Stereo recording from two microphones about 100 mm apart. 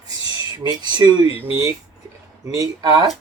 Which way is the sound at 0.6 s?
45° right (ahead or behind).